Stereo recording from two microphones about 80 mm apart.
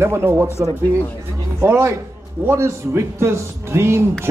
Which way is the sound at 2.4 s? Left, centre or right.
Right.